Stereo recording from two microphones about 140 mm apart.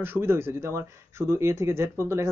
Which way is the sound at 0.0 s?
15° right (ahead or behind).